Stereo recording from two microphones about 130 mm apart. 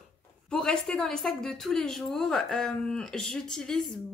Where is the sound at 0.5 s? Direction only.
5° left (ahead or behind).